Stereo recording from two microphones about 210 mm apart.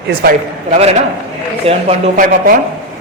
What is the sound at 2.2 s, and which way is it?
Speech, 40° right (ahead or behind).